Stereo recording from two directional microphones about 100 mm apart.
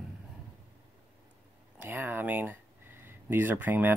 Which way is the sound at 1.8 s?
20° right (ahead or behind).